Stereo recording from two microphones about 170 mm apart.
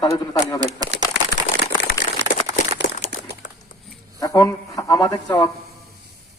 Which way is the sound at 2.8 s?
90° right.